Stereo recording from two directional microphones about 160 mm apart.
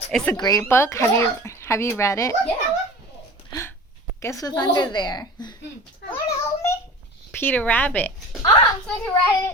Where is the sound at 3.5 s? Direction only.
15° left (ahead or behind).